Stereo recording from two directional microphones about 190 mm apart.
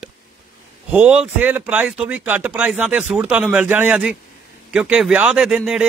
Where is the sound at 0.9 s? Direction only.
10° right (ahead or behind).